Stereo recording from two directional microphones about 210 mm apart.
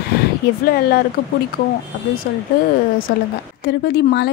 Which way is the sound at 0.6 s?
45° left (ahead or behind).